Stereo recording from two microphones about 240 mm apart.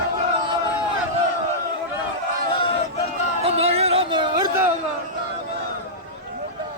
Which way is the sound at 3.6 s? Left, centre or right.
Right.